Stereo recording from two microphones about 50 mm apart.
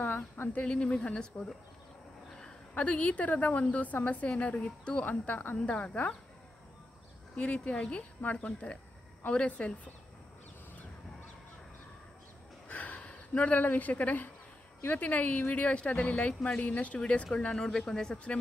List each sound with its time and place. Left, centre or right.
0.5 s speech: left
2.7 s speech: left
5.0 s speech: left
7.3 s speech: left
12.6 s a sound: left
14.9 s speech: left
17.6 s a man's voice: centre